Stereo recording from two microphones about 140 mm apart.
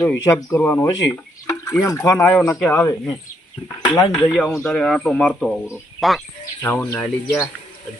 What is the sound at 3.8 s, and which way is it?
Speech, 30° left (ahead or behind).